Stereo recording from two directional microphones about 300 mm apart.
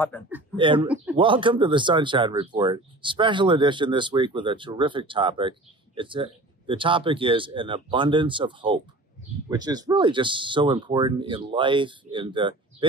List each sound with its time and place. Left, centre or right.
0.1 s speech: centre
0.6 s speech: centre